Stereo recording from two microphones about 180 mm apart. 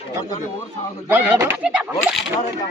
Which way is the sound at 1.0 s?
10° right (ahead or behind).